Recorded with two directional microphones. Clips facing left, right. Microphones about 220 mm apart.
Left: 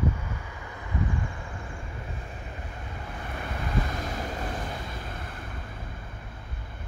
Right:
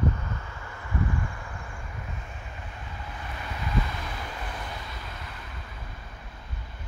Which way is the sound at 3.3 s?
50° left (ahead or behind).